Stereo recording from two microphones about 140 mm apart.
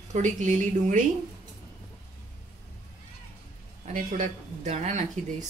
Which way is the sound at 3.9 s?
60° right (ahead or behind).